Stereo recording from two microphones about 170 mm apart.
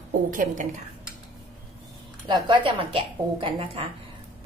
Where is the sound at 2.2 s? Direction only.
30° right (ahead or behind).